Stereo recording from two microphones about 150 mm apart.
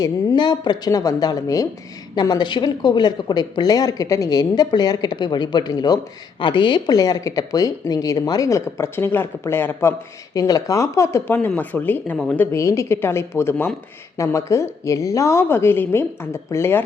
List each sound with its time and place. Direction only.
0.0 s a woman's voice: 30° left (ahead or behind); by 12.4 s centre (ahead or behind)
12.4 s a woman's voice: 15° left (ahead or behind)